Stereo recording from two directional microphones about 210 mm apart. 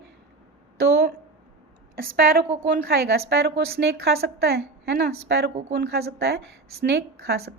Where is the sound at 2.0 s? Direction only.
45° right (ahead or behind).